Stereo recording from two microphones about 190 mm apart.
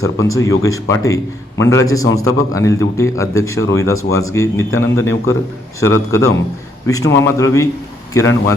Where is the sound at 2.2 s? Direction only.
15° left (ahead or behind).